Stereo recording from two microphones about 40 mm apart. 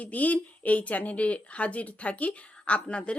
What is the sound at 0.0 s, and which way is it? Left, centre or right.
Speech, left.